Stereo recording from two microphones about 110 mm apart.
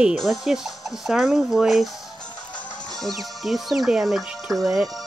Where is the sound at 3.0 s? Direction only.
Centre (ahead or behind).